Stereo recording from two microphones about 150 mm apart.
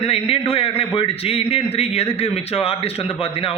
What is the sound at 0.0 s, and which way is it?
A man's voice, 40° left (ahead or behind).